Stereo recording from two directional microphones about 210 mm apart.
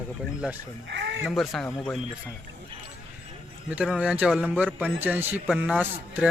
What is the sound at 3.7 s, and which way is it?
Speech, 5° right (ahead or behind).